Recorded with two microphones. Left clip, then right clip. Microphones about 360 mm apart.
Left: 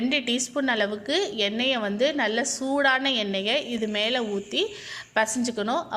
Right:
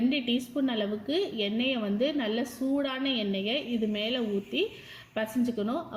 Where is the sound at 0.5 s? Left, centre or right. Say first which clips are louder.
Left 6 dB; centre.